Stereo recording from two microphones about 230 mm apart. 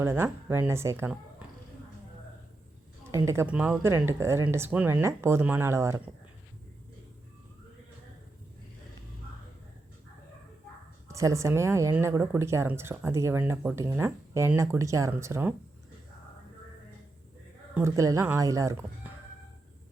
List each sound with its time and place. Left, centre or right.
0.0 s a woman's voice: centre
3.1 s a woman's voice: centre
11.1 s a woman's voice: centre
17.7 s a woman's voice: centre